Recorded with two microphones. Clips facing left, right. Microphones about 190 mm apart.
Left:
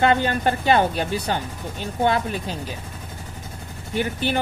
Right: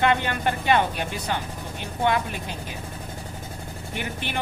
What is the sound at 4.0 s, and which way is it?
Speech, 35° left (ahead or behind).